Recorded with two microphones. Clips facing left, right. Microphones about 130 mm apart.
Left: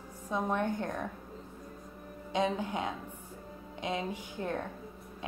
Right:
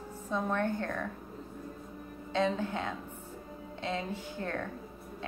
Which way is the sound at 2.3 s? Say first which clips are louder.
Right 1 dB; 15° left (ahead or behind).